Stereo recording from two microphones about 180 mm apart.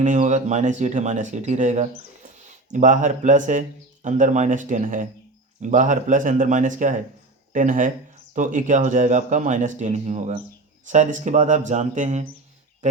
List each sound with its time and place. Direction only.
0.0 s speech: 40° right (ahead or behind)